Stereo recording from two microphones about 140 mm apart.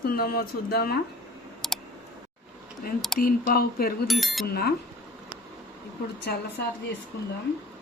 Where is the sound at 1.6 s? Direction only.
Centre (ahead or behind).